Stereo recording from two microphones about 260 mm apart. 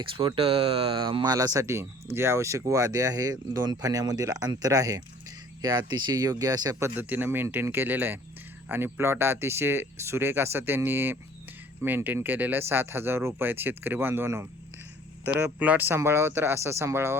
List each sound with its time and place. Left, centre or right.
0.0 s speech: centre